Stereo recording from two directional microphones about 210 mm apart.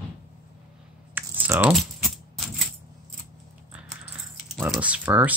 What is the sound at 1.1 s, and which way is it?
Coin, 10° right (ahead or behind).